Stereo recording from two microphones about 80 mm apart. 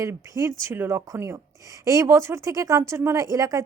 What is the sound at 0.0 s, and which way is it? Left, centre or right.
Speech, right.